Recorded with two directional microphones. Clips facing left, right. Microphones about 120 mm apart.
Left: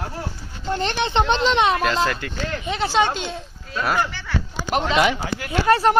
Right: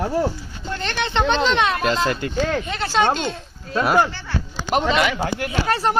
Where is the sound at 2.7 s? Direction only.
15° left (ahead or behind).